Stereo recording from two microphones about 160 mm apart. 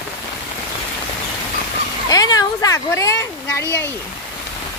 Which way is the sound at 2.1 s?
20° left (ahead or behind).